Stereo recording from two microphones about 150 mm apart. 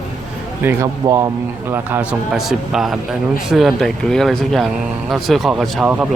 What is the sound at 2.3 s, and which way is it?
Speech, centre (ahead or behind).